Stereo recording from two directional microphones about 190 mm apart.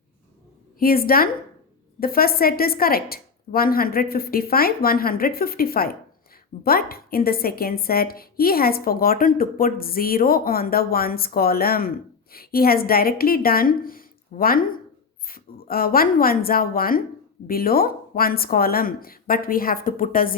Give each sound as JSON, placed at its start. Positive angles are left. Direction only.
{"t": 0.8, "sound": "a woman's voice", "side_deg": 50}